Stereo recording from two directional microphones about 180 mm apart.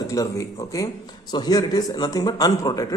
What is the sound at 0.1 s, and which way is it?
A man's voice, 20° left (ahead or behind).